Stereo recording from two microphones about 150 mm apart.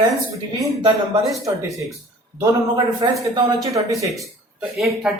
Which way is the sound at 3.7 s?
25° right (ahead or behind).